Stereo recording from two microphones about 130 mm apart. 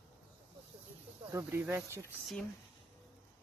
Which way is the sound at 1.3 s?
20° right (ahead or behind).